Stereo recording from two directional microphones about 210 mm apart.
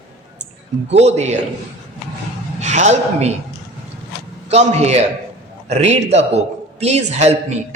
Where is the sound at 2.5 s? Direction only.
35° right (ahead or behind).